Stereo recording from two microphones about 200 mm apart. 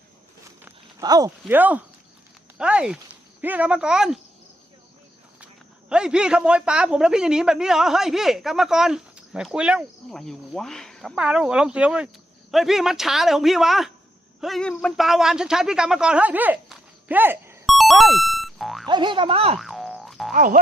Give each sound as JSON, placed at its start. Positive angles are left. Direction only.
{"t": 0.6, "sound": "speech", "side_deg": -15}
{"t": 5.9, "sound": "speech", "side_deg": -5}
{"t": 17.7, "sound": "boing", "side_deg": 0}
{"t": 18.9, "sound": "speech", "side_deg": -25}
{"t": 19.5, "sound": "boing", "side_deg": 0}
{"t": 20.3, "sound": "boing", "side_deg": -45}